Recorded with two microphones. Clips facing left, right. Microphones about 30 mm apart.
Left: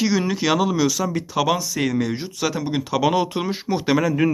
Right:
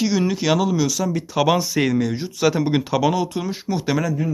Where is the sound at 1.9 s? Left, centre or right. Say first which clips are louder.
Right 1 dB; centre.